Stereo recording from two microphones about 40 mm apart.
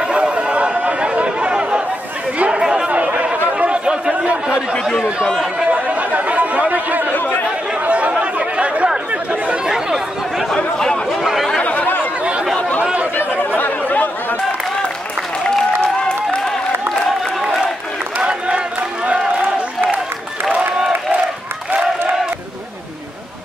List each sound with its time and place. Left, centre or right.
0.0 s chatter: right
4.1 s chatter: right
5.7 s chatter: right
7.1 s chatter: left
7.9 s chatter: right
9.7 s chatter: centre
10.5 s chatter: centre
11.6 s chatter: left
12.9 s chatter: right
13.6 s a sound: left
15.4 s applause: centre
19.0 s a sound: right